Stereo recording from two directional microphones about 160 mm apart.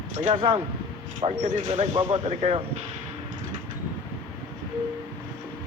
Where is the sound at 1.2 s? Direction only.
45° right (ahead or behind).